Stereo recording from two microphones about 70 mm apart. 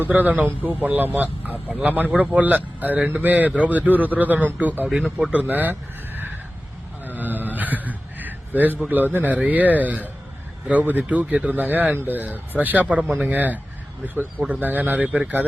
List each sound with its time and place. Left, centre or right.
0.0 s speech: right
7.0 s a sound: right
9.1 s speech: right